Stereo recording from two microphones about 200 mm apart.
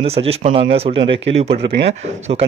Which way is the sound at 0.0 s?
30° right (ahead or behind).